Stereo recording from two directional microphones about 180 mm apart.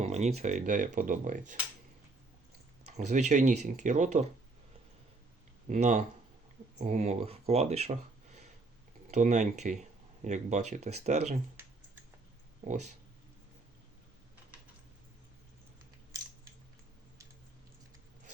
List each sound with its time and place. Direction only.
0.0 s speech: 40° right (ahead or behind)
2.8 s speech: 40° right (ahead or behind)
5.6 s speech: 40° right (ahead or behind)